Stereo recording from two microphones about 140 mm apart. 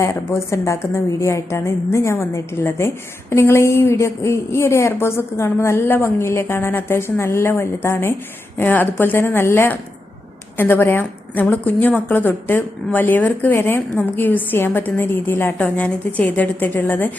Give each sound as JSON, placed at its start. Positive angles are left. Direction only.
{"t": 0.0, "sound": "a woman's voice", "side_deg": 20}